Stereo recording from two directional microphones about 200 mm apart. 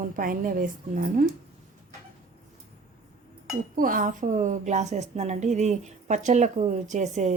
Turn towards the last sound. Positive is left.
turn(degrees=-35)  # may be behind; listen again after turning